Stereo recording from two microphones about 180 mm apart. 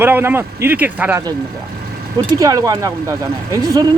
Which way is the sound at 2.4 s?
20° right (ahead or behind).